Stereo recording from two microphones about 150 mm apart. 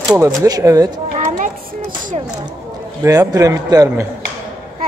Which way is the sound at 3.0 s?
25° right (ahead or behind).